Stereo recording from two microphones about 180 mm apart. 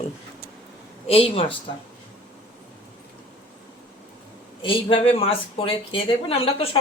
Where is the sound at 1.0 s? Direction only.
35° left (ahead or behind).